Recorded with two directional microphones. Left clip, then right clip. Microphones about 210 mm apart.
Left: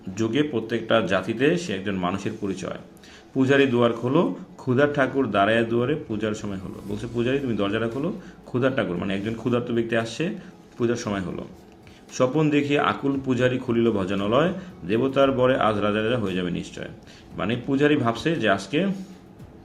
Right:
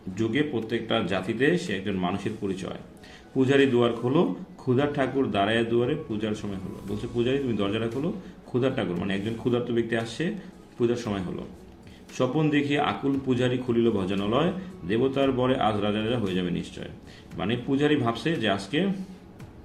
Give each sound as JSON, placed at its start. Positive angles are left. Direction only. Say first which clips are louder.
{"t": 0.2, "sound": "speech", "louder": "left 3 dB", "side_deg": 20}